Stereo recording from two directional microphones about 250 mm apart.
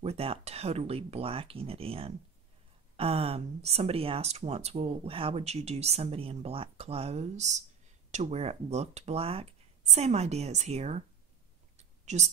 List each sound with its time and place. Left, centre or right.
0.0 s speech: right
12.1 s speech: right